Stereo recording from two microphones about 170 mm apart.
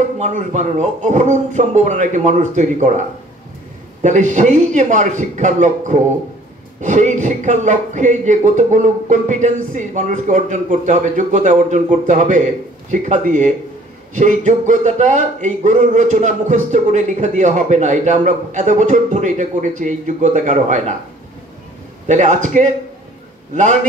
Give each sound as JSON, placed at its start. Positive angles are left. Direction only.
{"t": 0.2, "sound": "speech", "side_deg": -45}
{"t": 4.0, "sound": "speech", "side_deg": -45}
{"t": 22.0, "sound": "speech", "side_deg": -45}